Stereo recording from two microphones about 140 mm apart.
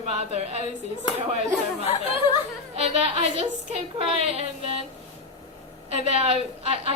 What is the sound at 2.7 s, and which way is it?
A woman's voice, 50° right (ahead or behind).